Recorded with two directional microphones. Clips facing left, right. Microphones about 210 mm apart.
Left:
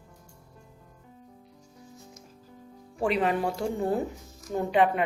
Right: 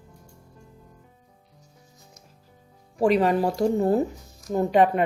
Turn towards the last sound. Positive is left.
turn(degrees=-40)  # may be behind; listen again after turning